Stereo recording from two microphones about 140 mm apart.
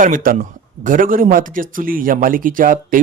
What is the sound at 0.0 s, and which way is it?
Speech, 80° right.